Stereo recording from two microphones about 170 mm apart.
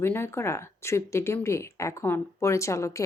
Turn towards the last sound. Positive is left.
turn(degrees=20)  # may be behind; listen again after turning